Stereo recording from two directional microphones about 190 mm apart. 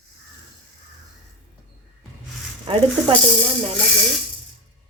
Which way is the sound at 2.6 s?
30° right (ahead or behind).